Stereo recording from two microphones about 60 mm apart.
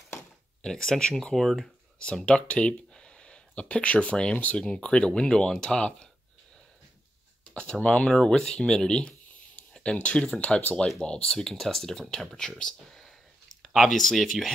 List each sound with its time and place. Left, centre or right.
0.6 s speech: centre
2.0 s speech: centre
7.5 s speech: centre